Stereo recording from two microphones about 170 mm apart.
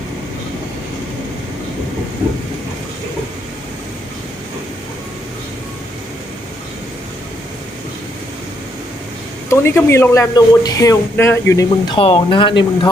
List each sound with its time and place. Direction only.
9.5 s speech: 15° left (ahead or behind)
11.9 s speech: 30° left (ahead or behind)